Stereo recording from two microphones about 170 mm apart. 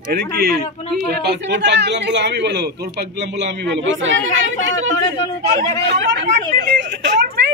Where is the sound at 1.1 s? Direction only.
75° right (ahead or behind); by 4.5 s 90° right.